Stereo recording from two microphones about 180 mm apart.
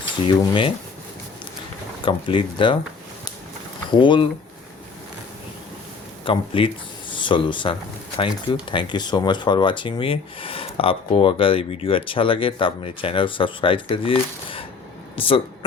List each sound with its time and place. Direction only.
0.3 s speech: 25° left (ahead or behind)
2.0 s speech: 30° left (ahead or behind)
4.0 s speech: 30° left (ahead or behind)
6.2 s speech: 30° left (ahead or behind)